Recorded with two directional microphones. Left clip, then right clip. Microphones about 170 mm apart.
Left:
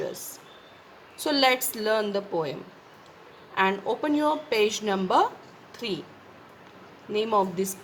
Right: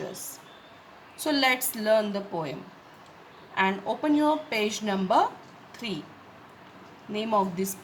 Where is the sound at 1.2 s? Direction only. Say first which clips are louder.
Left 2 dB; 20° left (ahead or behind).